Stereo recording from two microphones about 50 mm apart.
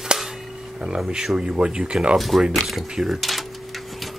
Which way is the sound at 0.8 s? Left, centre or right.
Centre.